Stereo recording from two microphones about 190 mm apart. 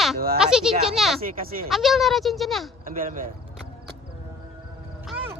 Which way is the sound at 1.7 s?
Centre (ahead or behind).